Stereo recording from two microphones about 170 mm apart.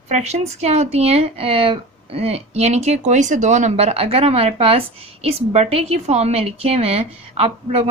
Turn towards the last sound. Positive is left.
turn(degrees=-35)  # may be behind; listen again after turning